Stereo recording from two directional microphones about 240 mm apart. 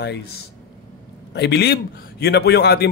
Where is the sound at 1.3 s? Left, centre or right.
Left.